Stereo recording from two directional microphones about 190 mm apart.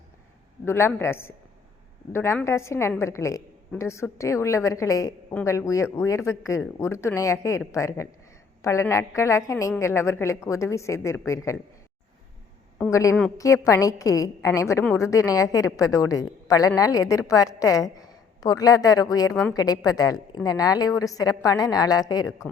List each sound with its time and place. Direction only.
0.6 s a woman's voice: 15° left (ahead or behind)
12.9 s a woman's voice: 15° left (ahead or behind)